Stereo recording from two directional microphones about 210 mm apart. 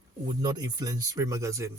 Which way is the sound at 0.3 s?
20° right (ahead or behind).